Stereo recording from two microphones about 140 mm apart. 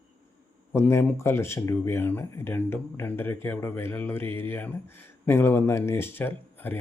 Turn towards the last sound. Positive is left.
turn(degrees=15)  # may be behind; listen again after turning